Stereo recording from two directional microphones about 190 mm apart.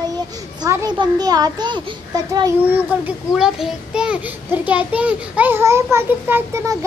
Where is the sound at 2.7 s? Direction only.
5° right (ahead or behind).